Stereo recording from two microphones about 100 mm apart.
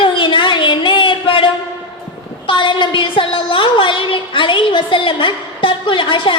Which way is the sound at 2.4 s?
55° left (ahead or behind).